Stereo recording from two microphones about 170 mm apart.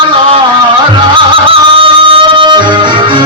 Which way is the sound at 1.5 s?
30° right (ahead or behind).